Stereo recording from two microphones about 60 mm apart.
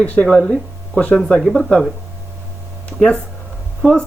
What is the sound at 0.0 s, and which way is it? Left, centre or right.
Speech, left.